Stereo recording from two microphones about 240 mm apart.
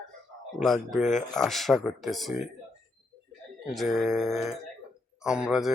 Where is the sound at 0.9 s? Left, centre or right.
Left.